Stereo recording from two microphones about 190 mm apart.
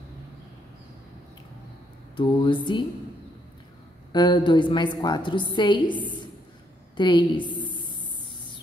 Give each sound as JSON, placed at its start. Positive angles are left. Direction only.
{"t": 2.1, "sound": "a woman's voice", "side_deg": 25}
{"t": 4.1, "sound": "a woman's voice", "side_deg": 25}